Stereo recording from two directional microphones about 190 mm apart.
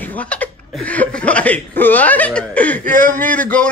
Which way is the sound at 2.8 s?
45° right (ahead or behind).